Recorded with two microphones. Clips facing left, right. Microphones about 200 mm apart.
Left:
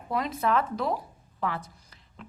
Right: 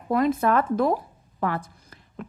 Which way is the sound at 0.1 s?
50° right (ahead or behind).